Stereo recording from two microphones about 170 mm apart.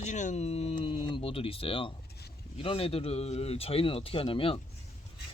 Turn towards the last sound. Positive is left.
turn(degrees=30)  # may be behind; listen again after turning